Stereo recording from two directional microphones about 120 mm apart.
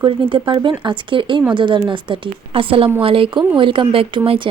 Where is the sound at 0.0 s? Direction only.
45° right (ahead or behind).